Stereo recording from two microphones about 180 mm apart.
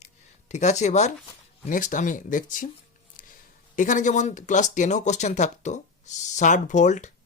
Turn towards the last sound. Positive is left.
turn(degrees=40)  # may be behind; listen again after turning